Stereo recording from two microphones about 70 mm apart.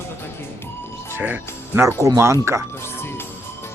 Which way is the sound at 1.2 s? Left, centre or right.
Right.